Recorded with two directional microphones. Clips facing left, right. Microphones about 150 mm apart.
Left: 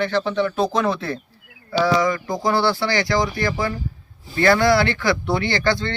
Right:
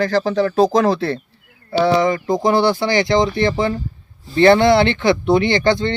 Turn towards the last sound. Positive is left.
turn(degrees=-20)  # may be behind; listen again after turning